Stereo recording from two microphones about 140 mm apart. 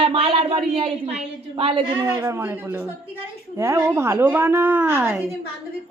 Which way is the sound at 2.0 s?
15° right (ahead or behind).